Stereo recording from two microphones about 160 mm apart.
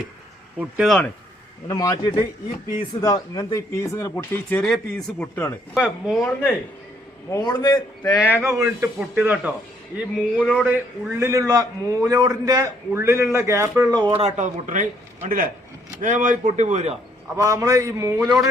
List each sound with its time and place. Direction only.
0.6 s speech: 5° right (ahead or behind)
1.6 s a man's voice: 20° left (ahead or behind)
5.7 s speech: 5° right (ahead or behind)
7.3 s a man's voice: 25° left (ahead or behind)
8.4 s a man's voice: 20° right (ahead or behind); by 16.9 s 45° right (ahead or behind)
17.3 s a man's voice: 20° right (ahead or behind)